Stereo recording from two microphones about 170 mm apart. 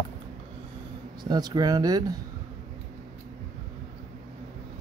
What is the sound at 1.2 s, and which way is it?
Speech, 25° right (ahead or behind).